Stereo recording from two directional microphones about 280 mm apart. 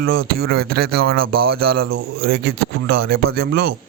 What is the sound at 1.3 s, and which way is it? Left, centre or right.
Speech, right.